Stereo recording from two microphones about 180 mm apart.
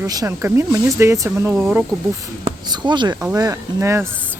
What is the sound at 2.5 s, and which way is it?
Speech, 25° right (ahead or behind).